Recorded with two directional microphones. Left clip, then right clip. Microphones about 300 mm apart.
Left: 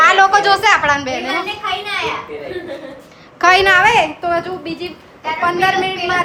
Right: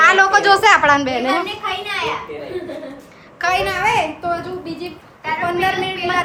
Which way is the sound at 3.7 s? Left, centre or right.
Centre.